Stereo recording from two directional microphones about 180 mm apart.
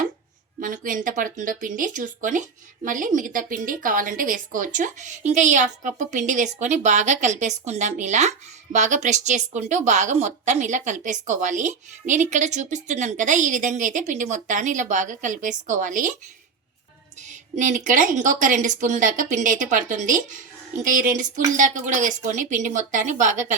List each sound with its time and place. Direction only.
0.6 s a woman's voice: 45° right (ahead or behind)
17.5 s a woman's voice: 45° right (ahead or behind)